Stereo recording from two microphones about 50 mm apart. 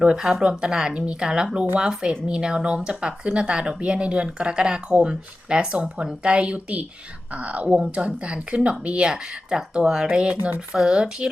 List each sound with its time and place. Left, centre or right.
0.0 s speech: centre